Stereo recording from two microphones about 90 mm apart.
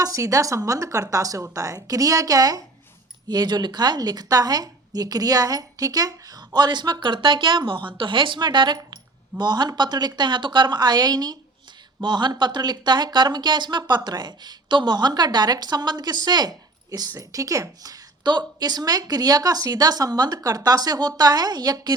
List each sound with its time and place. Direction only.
0.0 s a woman's voice: 40° right (ahead or behind)
3.2 s a woman's voice: 55° right (ahead or behind)